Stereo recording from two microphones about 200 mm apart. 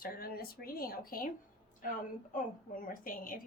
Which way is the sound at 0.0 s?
50° left (ahead or behind).